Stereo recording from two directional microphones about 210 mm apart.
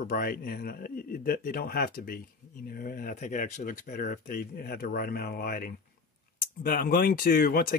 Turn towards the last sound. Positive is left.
turn(degrees=45)  # may be behind; listen again after turning